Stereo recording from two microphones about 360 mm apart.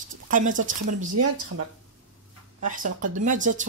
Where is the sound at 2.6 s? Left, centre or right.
Right.